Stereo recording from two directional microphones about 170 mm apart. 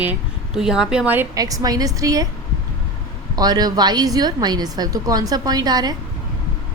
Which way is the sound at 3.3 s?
25° right (ahead or behind).